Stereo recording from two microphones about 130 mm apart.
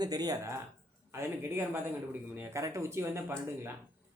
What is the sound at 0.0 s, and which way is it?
Speech, 30° right (ahead or behind).